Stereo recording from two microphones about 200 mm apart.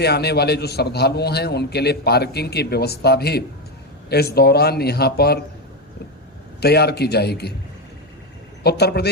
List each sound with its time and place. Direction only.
0.0 s a man's voice: 55° left (ahead or behind)
6.6 s a man's voice: 55° left (ahead or behind)
8.6 s a man's voice: 55° left (ahead or behind)